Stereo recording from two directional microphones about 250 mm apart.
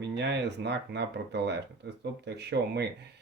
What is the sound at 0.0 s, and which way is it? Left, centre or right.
Speech, right.